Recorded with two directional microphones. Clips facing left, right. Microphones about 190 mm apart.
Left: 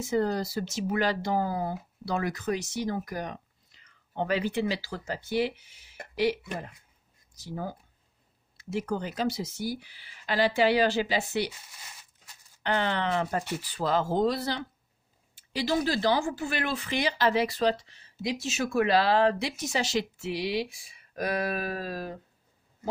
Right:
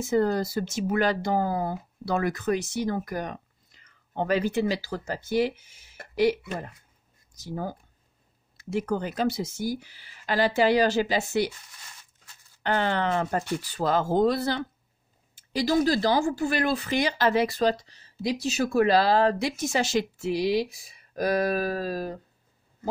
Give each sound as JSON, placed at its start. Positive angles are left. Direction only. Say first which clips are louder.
{"t": 0.0, "sound": "speech", "louder": "right 3 dB", "side_deg": -50}
{"t": 12.6, "sound": "speech", "louder": "right 3 dB", "side_deg": -45}